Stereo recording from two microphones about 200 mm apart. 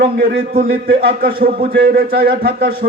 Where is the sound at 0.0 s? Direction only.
50° right (ahead or behind).